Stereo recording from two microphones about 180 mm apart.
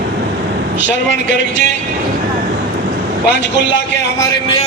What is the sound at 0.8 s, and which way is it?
Speech, 80° left.